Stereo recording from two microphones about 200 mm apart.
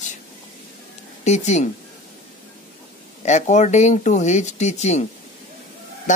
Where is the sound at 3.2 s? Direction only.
35° left (ahead or behind).